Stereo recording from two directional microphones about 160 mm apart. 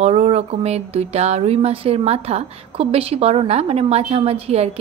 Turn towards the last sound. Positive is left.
turn(degrees=-40)  # may be behind; listen again after turning